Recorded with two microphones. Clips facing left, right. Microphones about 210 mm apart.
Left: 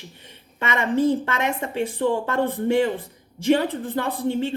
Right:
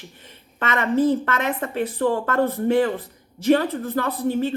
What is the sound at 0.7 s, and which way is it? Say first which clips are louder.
Speech: right 1 dB; 15° left (ahead or behind).